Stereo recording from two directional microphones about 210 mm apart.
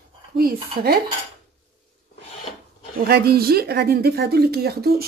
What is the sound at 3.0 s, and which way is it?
Speech, 45° right (ahead or behind).